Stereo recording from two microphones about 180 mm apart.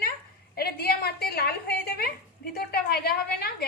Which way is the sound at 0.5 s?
60° left (ahead or behind).